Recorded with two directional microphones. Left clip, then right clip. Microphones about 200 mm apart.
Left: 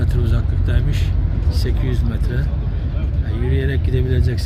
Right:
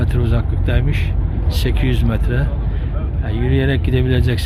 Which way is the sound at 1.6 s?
20° right (ahead or behind).